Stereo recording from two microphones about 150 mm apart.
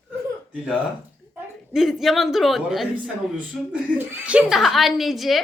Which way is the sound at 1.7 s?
Centre (ahead or behind).